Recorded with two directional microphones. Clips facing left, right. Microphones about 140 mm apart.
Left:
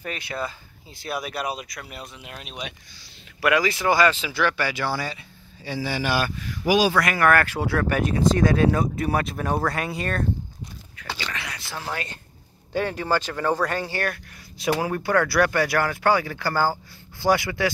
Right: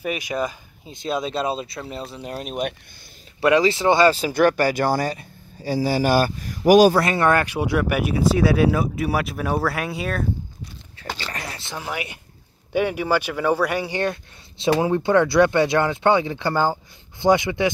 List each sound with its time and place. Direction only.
0.0 s speech: 15° right (ahead or behind); by 2.7 s 45° right (ahead or behind)
3.3 s speech: 25° right (ahead or behind); by 7.0 s 45° right (ahead or behind)
7.0 s speech: 25° right (ahead or behind); by 10.2 s centre (ahead or behind)
11.2 s a sound: 35° right (ahead or behind)
11.7 s speech: 15° right (ahead or behind)